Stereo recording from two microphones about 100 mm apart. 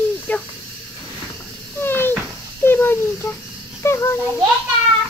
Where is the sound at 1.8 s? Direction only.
20° left (ahead or behind).